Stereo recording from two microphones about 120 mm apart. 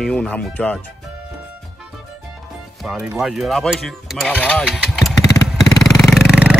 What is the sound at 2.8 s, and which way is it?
Speech, 5° right (ahead or behind).